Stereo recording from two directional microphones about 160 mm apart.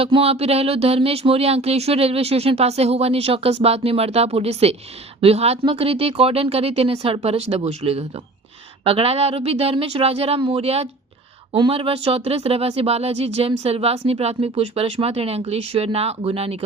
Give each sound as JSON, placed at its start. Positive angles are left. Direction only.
{"t": 0.0, "sound": "speech", "side_deg": -40}